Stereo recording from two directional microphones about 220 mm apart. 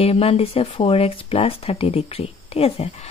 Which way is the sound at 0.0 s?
25° left (ahead or behind).